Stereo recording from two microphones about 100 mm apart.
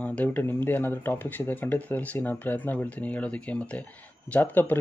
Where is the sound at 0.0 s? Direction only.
15° left (ahead or behind).